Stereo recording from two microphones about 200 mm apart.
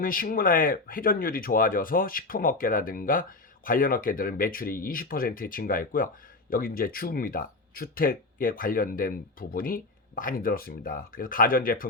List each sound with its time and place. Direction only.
0.0 s speech: 45° left (ahead or behind)